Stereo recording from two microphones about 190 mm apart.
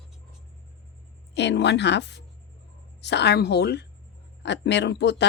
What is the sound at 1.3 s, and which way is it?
Speech, 65° left (ahead or behind).